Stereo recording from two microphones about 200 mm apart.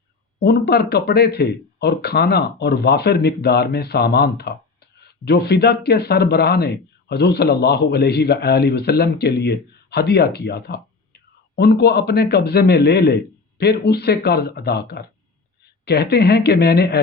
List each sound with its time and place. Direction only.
0.3 s speech: 55° left (ahead or behind)